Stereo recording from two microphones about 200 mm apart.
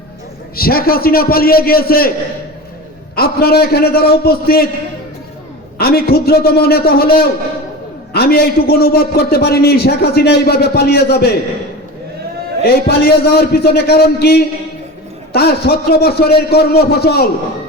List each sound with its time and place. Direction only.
0.5 s a man's voice: 50° left (ahead or behind)
3.2 s a man's voice: 50° left (ahead or behind)
5.7 s a man's voice: 50° left (ahead or behind)
12.6 s a man's voice: 50° left (ahead or behind)